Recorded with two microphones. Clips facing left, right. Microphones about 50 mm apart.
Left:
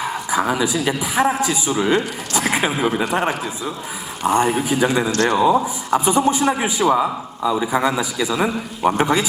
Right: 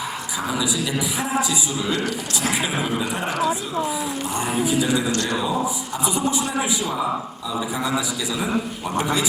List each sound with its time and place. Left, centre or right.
0.3 s a man's voice: left